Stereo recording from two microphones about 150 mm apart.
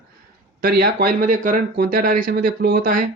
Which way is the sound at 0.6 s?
90° right.